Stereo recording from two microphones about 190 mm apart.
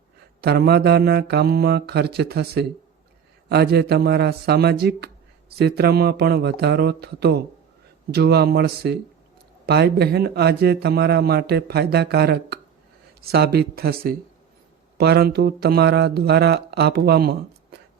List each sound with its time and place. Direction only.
0.4 s a man's voice: 60° right (ahead or behind)